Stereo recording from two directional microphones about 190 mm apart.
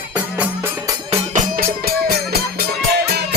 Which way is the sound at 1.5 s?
55° right (ahead or behind).